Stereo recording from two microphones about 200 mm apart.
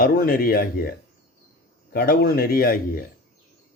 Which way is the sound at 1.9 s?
50° left (ahead or behind).